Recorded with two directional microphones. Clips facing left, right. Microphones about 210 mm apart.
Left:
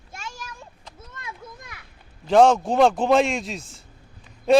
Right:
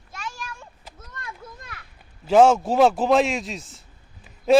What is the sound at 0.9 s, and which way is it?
Children playing, 10° left (ahead or behind).